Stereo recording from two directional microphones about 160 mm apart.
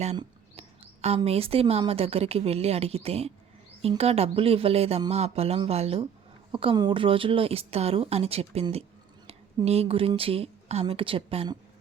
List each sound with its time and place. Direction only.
1.0 s a woman's voice: 40° right (ahead or behind)